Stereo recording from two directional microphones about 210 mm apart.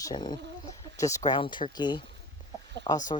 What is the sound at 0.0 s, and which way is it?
Speech, 20° left (ahead or behind).